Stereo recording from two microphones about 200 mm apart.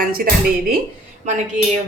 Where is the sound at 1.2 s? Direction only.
35° right (ahead or behind).